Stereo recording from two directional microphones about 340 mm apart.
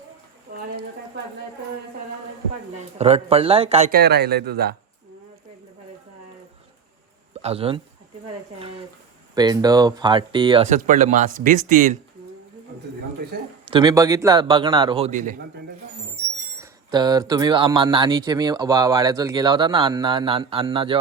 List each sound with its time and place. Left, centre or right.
2.7 s speech: centre
7.4 s speech: centre
9.3 s speech: centre
13.7 s speech: centre
16.6 s speech: centre